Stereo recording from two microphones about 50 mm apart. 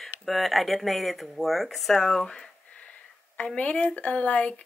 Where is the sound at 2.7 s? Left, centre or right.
Left.